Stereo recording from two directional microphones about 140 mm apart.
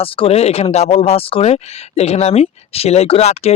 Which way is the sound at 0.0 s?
40° left (ahead or behind).